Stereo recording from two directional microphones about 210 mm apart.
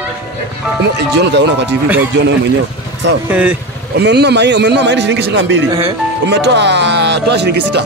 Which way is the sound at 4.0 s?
50° right (ahead or behind).